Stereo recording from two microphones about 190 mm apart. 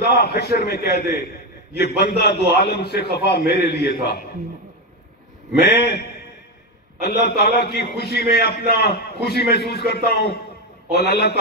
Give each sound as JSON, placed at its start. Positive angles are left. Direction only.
{"t": 0.0, "sound": "a man's voice", "side_deg": 55}
{"t": 5.6, "sound": "a man's voice", "side_deg": 55}